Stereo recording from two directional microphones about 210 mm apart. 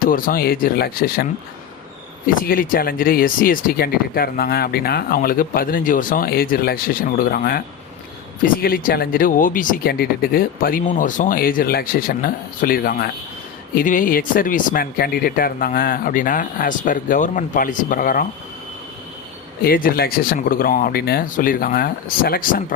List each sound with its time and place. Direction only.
0.0 s speech: 45° left (ahead or behind)
19.6 s speech: 45° left (ahead or behind)